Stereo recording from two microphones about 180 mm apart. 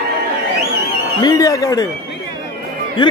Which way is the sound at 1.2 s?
20° left (ahead or behind).